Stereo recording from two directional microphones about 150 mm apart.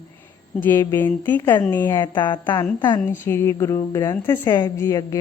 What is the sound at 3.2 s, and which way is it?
A woman's voice, 15° left (ahead or behind).